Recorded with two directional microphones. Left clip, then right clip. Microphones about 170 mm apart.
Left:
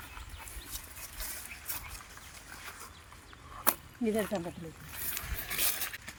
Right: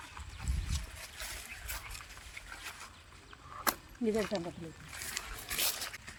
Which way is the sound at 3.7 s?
5° left (ahead or behind).